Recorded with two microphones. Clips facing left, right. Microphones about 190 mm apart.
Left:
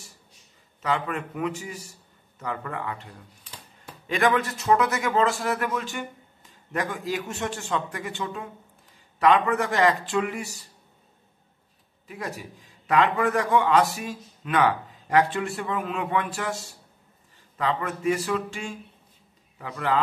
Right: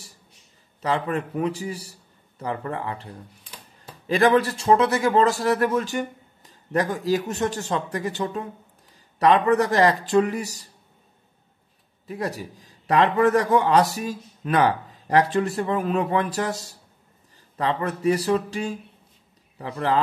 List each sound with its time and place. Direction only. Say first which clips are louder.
0.8 s speech: right 3 dB; 35° right (ahead or behind)
12.1 s speech: right 6 dB; 35° right (ahead or behind)